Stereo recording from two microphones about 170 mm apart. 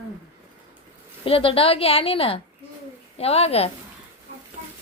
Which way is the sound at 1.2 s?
30° left (ahead or behind).